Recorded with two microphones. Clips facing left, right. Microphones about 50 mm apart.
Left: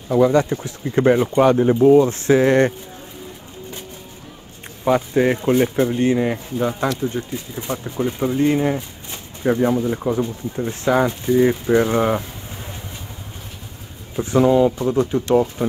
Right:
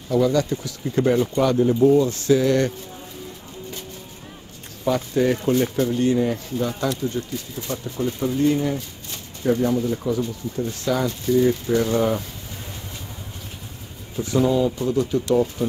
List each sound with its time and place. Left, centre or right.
0.1 s speech: left
4.8 s speech: left
14.1 s speech: left